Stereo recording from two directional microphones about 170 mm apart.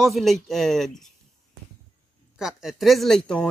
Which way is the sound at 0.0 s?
Centre (ahead or behind).